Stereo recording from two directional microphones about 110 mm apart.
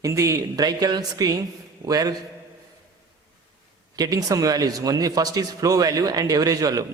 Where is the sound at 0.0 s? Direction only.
30° right (ahead or behind).